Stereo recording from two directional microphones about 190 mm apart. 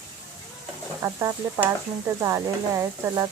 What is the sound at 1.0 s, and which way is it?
Speech, 15° right (ahead or behind).